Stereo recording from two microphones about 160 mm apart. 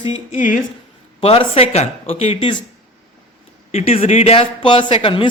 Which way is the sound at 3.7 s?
40° left (ahead or behind).